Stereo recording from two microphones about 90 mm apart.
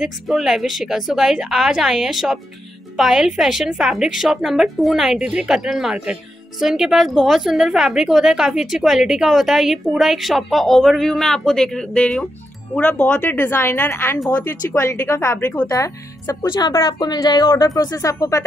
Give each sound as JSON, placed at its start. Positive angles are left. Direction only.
{"t": 0.0, "sound": "speech", "side_deg": -5}
{"t": 15.4, "sound": "speech", "side_deg": 15}
{"t": 15.7, "sound": "speech", "side_deg": 35}
{"t": 16.4, "sound": "speech", "side_deg": 60}